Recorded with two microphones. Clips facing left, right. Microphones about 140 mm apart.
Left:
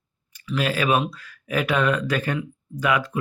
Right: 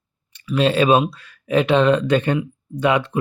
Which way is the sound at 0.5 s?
30° right (ahead or behind).